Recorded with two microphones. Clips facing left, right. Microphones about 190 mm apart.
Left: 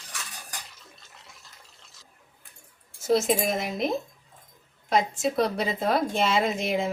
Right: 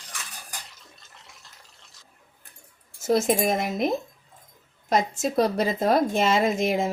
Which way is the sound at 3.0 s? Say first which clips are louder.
Right 2 dB; 50° right (ahead or behind).